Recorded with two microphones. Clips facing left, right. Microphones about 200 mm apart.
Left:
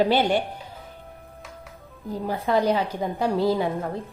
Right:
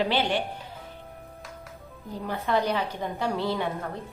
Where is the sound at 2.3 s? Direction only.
35° left (ahead or behind).